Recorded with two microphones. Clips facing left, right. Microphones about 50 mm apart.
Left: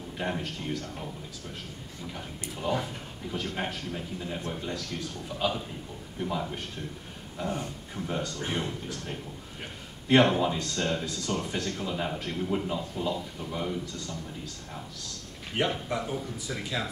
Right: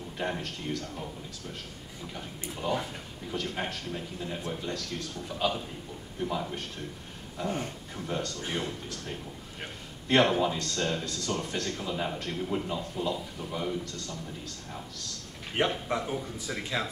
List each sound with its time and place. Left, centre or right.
0.2 s speech: centre
2.5 s speech: centre
15.5 s speech: centre